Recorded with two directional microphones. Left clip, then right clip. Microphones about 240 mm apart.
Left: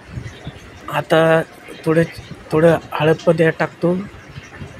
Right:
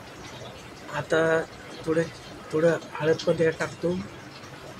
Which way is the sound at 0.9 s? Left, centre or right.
Left.